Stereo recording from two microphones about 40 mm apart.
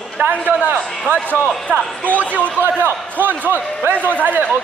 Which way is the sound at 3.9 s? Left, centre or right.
Right.